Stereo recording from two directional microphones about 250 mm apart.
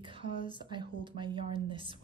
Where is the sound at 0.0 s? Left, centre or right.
Right.